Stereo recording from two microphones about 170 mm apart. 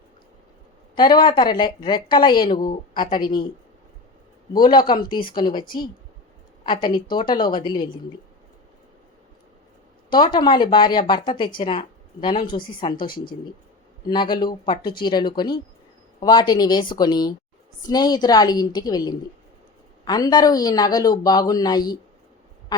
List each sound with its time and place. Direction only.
0.9 s speech: 25° left (ahead or behind)
4.5 s speech: 25° left (ahead or behind)
10.1 s speech: 25° left (ahead or behind)
14.1 s speech: 25° left (ahead or behind)